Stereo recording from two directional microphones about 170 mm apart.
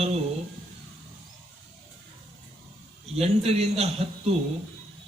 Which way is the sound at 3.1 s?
35° right (ahead or behind).